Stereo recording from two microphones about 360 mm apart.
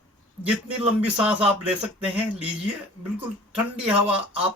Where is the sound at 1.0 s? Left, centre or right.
Centre.